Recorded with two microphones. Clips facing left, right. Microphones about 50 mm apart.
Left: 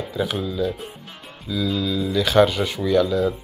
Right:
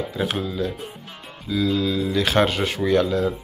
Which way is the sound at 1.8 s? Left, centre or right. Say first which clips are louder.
Even; right.